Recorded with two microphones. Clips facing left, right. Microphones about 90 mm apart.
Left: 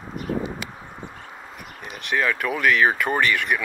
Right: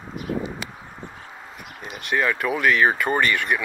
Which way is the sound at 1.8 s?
Centre (ahead or behind).